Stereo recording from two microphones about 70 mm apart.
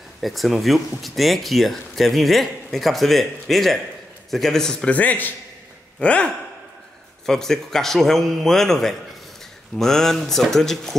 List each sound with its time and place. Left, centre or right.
0.2 s speech: centre
4.9 s a man's voice: left; by 11.0 s centre